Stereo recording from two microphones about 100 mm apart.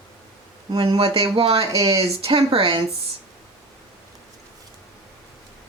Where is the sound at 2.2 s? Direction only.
70° right (ahead or behind).